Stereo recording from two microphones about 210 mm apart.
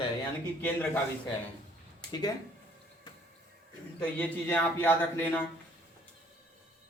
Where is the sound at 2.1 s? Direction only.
20° left (ahead or behind).